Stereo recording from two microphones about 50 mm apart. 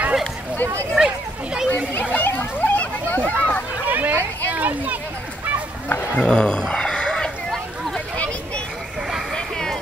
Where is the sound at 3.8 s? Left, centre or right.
Right.